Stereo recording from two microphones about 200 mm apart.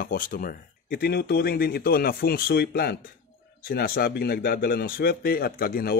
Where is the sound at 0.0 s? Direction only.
45° left (ahead or behind).